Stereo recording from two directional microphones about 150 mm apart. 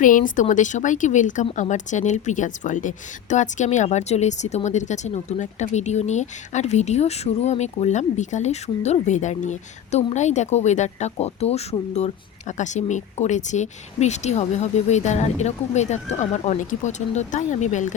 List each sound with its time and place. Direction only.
0.0 s a woman's voice: 60° left (ahead or behind)